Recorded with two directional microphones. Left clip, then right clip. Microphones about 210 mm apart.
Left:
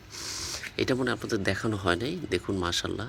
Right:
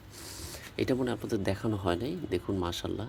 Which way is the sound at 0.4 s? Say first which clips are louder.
Left 3 dB; centre (ahead or behind).